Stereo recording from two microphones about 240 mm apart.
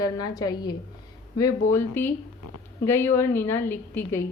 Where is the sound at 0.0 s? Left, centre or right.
Centre.